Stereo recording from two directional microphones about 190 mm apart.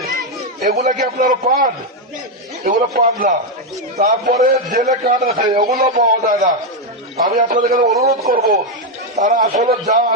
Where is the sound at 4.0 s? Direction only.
40° right (ahead or behind).